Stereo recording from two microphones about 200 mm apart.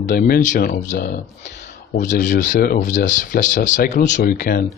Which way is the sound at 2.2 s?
40° left (ahead or behind).